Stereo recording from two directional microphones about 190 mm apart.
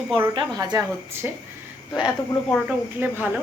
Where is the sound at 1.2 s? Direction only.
10° right (ahead or behind).